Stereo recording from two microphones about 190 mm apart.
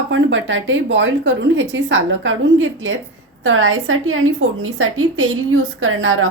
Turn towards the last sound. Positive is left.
turn(degrees=-90)